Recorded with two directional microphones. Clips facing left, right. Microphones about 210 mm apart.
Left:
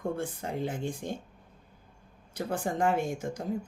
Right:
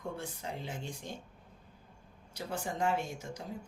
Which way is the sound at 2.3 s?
55° left (ahead or behind).